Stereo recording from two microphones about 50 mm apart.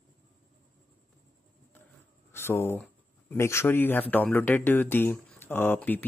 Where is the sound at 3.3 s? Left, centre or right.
Left.